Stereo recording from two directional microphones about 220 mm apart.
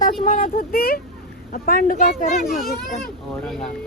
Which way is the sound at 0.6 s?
45° left (ahead or behind).